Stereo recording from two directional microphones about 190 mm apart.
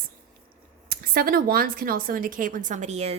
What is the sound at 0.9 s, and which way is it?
A woman's voice, 50° right (ahead or behind).